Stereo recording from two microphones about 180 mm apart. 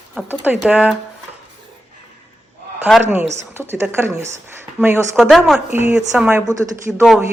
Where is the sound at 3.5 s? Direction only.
15° right (ahead or behind).